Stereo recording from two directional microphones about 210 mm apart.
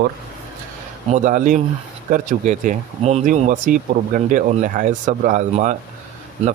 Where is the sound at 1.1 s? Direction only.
35° right (ahead or behind).